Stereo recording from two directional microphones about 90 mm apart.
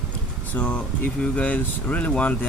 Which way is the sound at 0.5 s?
15° left (ahead or behind).